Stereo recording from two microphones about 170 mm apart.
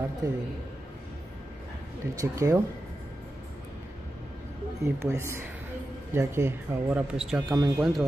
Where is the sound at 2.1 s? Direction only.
20° right (ahead or behind).